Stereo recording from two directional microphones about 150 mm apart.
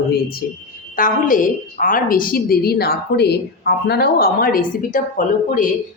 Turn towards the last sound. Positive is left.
turn(degrees=60)  # may be behind; listen again after turning